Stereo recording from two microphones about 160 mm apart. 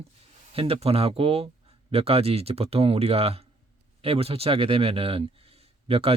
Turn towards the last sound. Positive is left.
turn(degrees=-40)  # may be behind; listen again after turning